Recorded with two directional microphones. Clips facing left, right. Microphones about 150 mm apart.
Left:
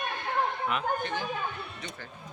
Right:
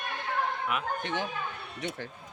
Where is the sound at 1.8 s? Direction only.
90° right.